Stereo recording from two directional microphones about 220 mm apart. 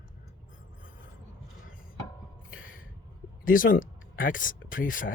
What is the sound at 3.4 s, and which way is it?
Speech, 40° left (ahead or behind).